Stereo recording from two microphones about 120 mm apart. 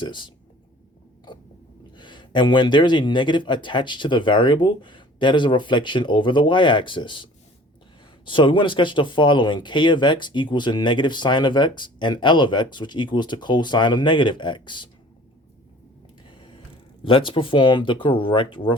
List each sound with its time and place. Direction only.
0.0 s speech: 40° left (ahead or behind)
2.0 s speech: 40° left (ahead or behind)
16.3 s a sound: 45° left (ahead or behind)
17.0 s speech: 45° left (ahead or behind)